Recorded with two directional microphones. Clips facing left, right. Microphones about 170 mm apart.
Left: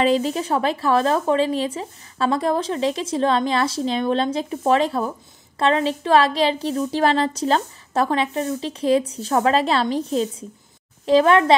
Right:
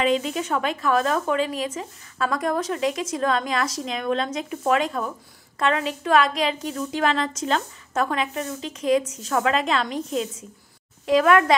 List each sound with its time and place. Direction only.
0.0 s a woman's voice: 35° left (ahead or behind)